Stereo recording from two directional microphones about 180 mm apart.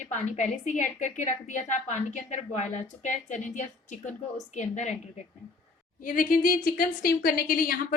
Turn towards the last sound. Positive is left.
turn(degrees=55)  # may be behind; listen again after turning